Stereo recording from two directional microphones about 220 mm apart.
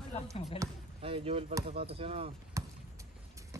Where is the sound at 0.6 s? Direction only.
25° right (ahead or behind).